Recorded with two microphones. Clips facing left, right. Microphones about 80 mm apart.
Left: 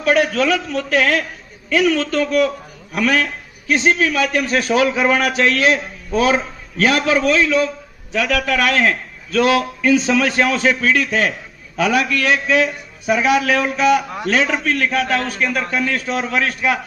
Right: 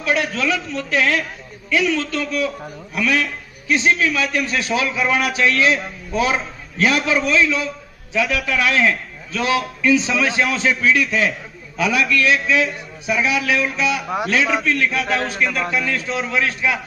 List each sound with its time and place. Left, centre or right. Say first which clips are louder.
0.0 s a man's voice: left 5 dB; left
8.1 s a man's voice: left 2 dB; left